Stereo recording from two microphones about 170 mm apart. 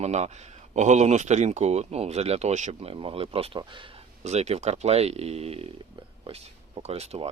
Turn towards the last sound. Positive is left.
turn(degrees=-40)  # may be behind; listen again after turning